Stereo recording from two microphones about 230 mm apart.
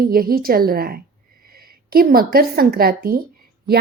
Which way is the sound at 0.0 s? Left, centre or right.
Right.